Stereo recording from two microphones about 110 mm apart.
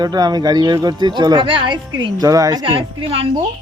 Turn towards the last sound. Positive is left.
turn(degrees=-55)  # may be behind; listen again after turning